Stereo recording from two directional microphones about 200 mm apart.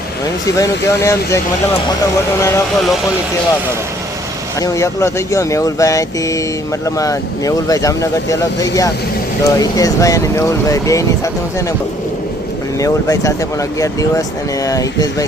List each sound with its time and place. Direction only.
0.5 s speech: 15° left (ahead or behind)
4.6 s speech: 15° left (ahead or behind)
12.8 s speech: 15° left (ahead or behind)